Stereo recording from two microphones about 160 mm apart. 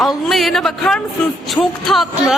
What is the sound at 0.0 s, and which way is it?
A man's voice, centre (ahead or behind).